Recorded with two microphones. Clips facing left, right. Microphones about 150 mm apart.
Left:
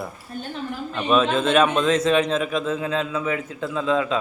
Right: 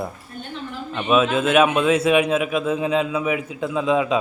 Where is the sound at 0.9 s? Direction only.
5° right (ahead or behind).